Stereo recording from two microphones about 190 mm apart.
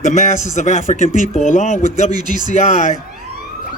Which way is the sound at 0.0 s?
40° left (ahead or behind).